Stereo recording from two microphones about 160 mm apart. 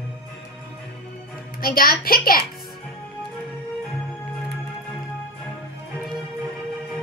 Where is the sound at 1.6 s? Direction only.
65° left (ahead or behind).